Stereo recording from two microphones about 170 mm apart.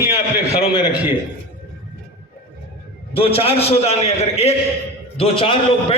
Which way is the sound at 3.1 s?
35° left (ahead or behind).